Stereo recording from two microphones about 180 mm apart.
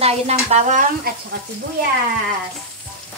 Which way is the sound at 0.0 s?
35° right (ahead or behind).